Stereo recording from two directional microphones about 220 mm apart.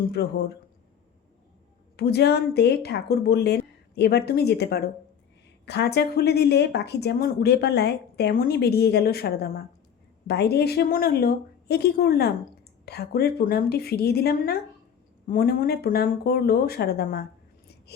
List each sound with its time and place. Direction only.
0.1 s speech: 50° left (ahead or behind)
2.0 s speech: 45° left (ahead or behind)